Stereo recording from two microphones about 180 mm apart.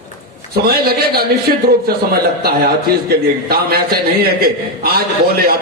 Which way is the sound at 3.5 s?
55° right (ahead or behind).